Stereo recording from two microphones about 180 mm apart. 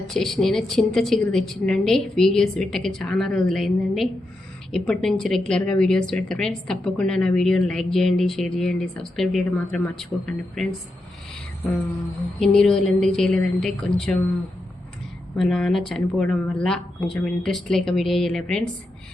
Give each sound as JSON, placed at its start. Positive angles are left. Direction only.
{"t": 0.1, "sound": "a woman's voice", "side_deg": 0}
{"t": 12.4, "sound": "a woman's voice", "side_deg": 5}
{"t": 15.4, "sound": "a woman's voice", "side_deg": 5}